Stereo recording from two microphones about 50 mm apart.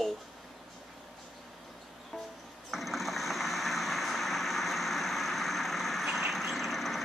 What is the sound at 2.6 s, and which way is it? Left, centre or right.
Vehicle, centre.